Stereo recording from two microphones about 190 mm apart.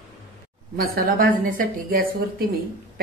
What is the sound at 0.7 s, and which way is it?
A woman's voice, 55° right (ahead or behind).